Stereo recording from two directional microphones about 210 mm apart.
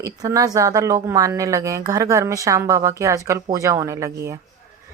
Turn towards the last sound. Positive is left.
turn(degrees=-15)  # may be behind; listen again after turning